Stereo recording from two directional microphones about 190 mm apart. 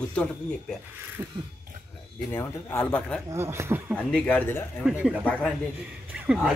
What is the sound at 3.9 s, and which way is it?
Speech, 5° left (ahead or behind).